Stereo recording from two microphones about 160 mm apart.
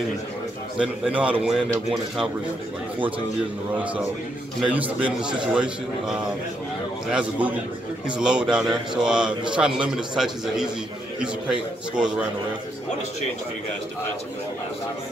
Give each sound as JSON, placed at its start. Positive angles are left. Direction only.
{"t": 0.7, "sound": "a man's voice", "side_deg": -5}
{"t": 4.6, "sound": "a man's voice", "side_deg": -5}